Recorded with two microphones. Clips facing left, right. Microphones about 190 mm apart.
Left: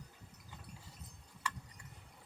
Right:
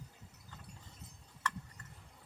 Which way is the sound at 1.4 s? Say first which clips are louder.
Right 3 dB; 10° left (ahead or behind).